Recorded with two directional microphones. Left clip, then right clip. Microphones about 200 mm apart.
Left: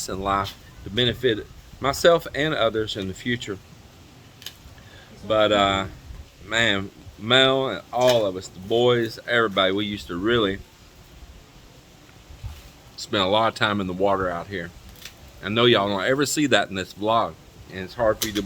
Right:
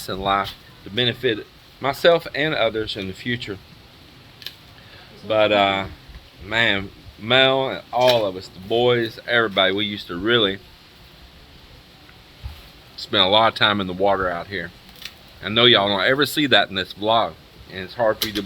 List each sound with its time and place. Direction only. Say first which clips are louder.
0.0 s speech: right 3 dB; 10° left (ahead or behind)
5.3 s speech: right 2 dB; 20° left (ahead or behind)
13.1 s speech: right 4 dB; 10° left (ahead or behind)